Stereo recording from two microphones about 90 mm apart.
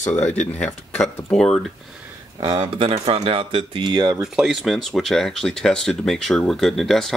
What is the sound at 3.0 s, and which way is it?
Speech, 90° right.